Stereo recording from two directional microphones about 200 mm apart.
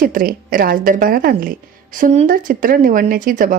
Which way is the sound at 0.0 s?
45° right (ahead or behind).